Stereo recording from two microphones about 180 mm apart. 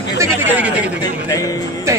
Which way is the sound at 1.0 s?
20° left (ahead or behind).